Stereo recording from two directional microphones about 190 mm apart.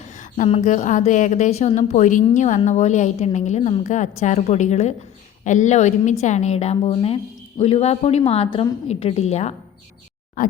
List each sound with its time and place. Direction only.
0.2 s a woman's voice: 35° left (ahead or behind)